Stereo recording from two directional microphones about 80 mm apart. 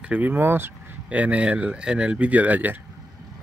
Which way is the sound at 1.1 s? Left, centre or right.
Centre.